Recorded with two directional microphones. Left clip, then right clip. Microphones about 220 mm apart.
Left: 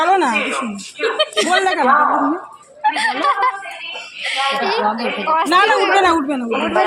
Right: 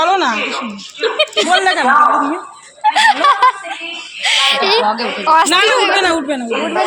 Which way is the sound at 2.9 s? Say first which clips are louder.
Right 9 dB; 20° right (ahead or behind).